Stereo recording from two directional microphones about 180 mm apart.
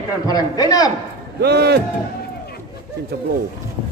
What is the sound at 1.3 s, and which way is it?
Speech, 65° right (ahead or behind).